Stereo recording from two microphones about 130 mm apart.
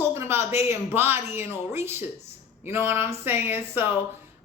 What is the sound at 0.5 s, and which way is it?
A woman's voice, 20° right (ahead or behind).